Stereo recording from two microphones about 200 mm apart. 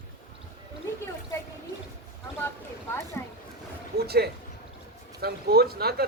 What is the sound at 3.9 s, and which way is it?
A man's voice, 55° right (ahead or behind).